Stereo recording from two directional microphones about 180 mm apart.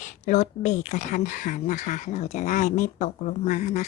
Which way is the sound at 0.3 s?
40° left (ahead or behind).